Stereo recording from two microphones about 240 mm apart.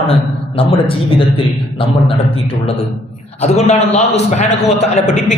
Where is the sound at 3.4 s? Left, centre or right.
Left.